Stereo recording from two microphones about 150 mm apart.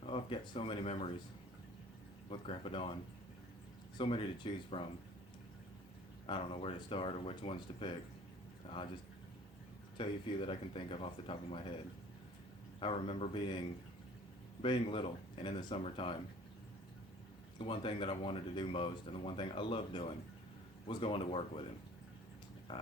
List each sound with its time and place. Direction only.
0.0 s speech: 35° left (ahead or behind)
2.3 s speech: 35° left (ahead or behind)
3.9 s speech: 35° left (ahead or behind)
6.2 s speech: 40° left (ahead or behind)
10.0 s speech: 35° left (ahead or behind)
12.8 s speech: 40° left (ahead or behind)
14.6 s speech: 35° left (ahead or behind)
17.6 s speech: 35° left (ahead or behind)